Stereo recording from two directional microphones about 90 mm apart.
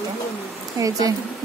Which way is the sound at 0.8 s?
40° right (ahead or behind).